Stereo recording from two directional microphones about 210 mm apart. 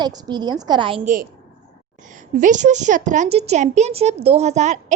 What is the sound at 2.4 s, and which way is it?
A woman's voice, 35° right (ahead or behind).